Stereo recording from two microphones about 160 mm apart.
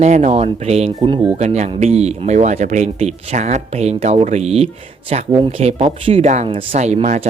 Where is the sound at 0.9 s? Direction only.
30° right (ahead or behind).